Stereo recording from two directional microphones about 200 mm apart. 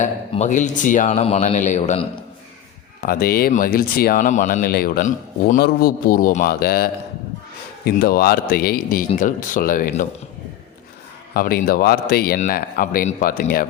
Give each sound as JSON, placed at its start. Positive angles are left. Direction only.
{"t": 0.0, "sound": "speech", "side_deg": 35}
{"t": 3.0, "sound": "speech", "side_deg": 45}
{"t": 11.3, "sound": "speech", "side_deg": 50}